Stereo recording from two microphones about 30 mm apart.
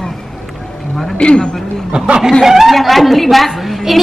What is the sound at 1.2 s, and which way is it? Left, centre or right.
Speech, left.